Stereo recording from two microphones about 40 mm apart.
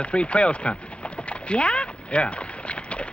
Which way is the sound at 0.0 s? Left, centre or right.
Left.